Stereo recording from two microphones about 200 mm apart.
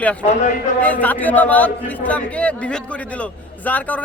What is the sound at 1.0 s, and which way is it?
A man's voice, 10° left (ahead or behind).